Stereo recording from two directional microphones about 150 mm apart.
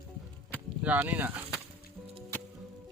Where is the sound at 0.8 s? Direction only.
10° right (ahead or behind).